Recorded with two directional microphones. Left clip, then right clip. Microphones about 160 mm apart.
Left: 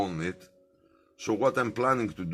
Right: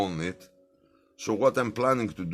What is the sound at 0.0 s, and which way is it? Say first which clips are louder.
Music: right 1 dB; 40° right (ahead or behind).